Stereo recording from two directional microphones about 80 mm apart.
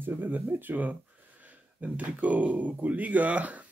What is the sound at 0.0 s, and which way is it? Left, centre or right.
Speech, right.